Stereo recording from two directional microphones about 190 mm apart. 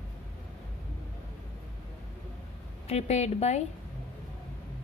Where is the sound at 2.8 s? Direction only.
35° left (ahead or behind).